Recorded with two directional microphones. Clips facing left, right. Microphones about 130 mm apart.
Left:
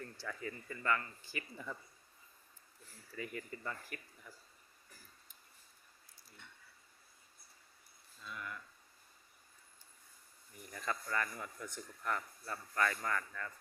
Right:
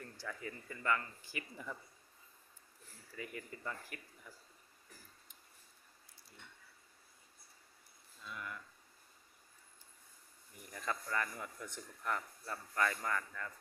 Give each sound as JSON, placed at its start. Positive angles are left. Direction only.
{"t": 0.2, "sound": "a man's voice", "side_deg": -20}
{"t": 3.2, "sound": "a man's voice", "side_deg": -15}
{"t": 8.2, "sound": "a sound", "side_deg": -10}
{"t": 10.7, "sound": "a man's voice", "side_deg": -15}